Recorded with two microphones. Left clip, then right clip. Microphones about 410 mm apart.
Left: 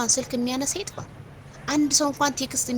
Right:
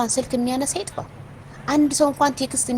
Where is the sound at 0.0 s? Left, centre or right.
Left.